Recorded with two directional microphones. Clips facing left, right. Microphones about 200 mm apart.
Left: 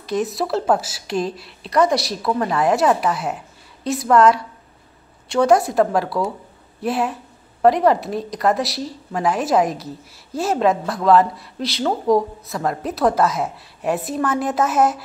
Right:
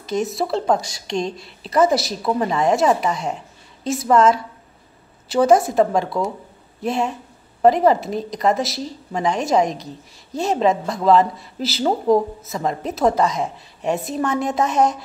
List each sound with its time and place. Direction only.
0.0 s a woman's voice: centre (ahead or behind)
2.2 s a woman's voice: 15° right (ahead or behind)
2.5 s a woman's voice: centre (ahead or behind)